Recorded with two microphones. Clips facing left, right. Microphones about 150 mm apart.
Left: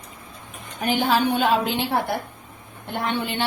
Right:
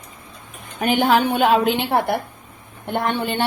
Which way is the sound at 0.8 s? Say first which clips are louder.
Right 4 dB; 60° right (ahead or behind).